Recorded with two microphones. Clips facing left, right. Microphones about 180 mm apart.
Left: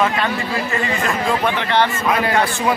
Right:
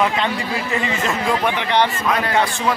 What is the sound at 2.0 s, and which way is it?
Speech, 5° left (ahead or behind).